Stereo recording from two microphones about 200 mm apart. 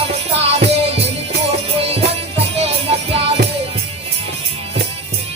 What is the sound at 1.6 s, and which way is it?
Music, 30° right (ahead or behind).